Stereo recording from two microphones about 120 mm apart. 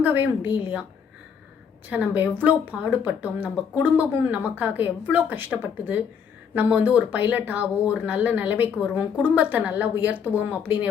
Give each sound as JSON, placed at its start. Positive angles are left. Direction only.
{"t": 0.0, "sound": "speech", "side_deg": -15}
{"t": 1.9, "sound": "speech", "side_deg": -15}